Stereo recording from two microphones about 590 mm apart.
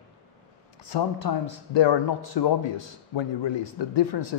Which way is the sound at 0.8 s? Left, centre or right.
Left.